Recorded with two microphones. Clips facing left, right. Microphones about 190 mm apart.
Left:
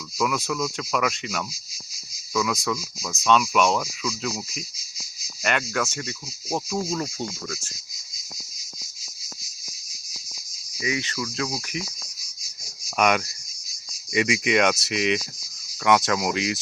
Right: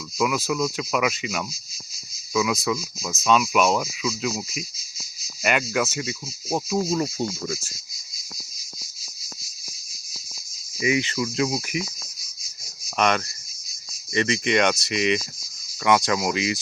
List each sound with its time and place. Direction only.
0.2 s speech: 5° right (ahead or behind)
10.8 s speech: 20° right (ahead or behind)
13.0 s speech: 10° left (ahead or behind)